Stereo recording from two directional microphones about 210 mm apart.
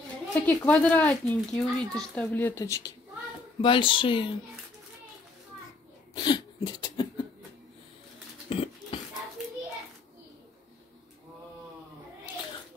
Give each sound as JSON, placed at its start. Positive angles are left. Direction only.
{"t": 0.3, "sound": "a child's voice", "side_deg": 5}
{"t": 6.1, "sound": "cough", "side_deg": 20}
{"t": 8.5, "sound": "a sound", "side_deg": 25}